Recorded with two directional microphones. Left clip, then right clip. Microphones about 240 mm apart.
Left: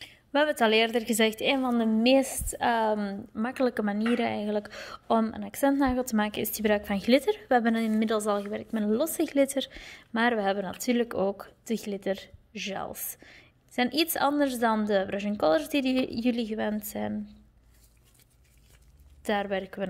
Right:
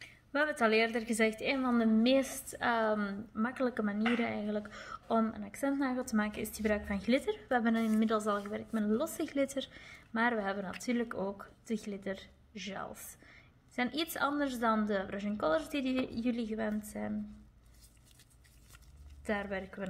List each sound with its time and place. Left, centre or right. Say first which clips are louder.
0.0 s a woman's voice: left 7 dB; left
19.2 s a woman's voice: left 8 dB; left